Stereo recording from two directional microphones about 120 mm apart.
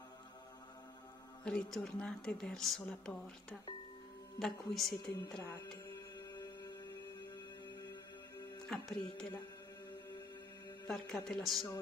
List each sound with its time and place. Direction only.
1.4 s speech: 5° left (ahead or behind)
5.4 s speech: 20° left (ahead or behind)
8.6 s speech: 5° left (ahead or behind)
10.9 s speech: 5° left (ahead or behind)